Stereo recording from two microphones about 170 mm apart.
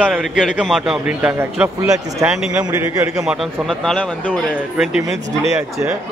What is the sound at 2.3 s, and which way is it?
Speech, 5° right (ahead or behind).